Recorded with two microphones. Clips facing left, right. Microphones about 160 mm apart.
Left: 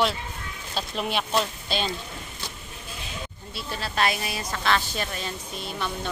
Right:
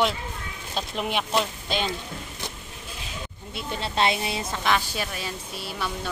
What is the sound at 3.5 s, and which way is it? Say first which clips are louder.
Speech: right 2 dB; 20° right (ahead or behind).